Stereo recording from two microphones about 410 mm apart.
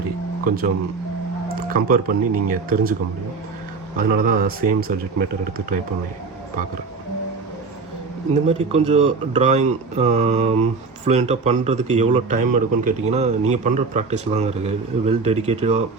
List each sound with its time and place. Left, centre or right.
0.4 s speech: right
1.7 s speech: centre
3.9 s speech: right
8.3 s speech: centre